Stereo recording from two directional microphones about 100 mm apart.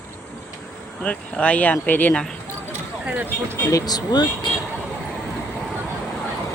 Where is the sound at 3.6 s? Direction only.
35° left (ahead or behind).